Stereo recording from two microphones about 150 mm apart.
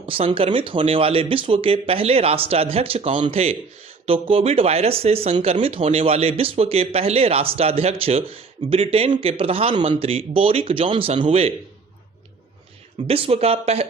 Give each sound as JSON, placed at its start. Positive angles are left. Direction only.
{"t": 0.0, "sound": "speech", "side_deg": -35}
{"t": 13.1, "sound": "speech", "side_deg": -40}